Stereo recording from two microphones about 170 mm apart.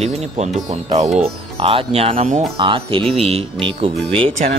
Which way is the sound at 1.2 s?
35° right (ahead or behind).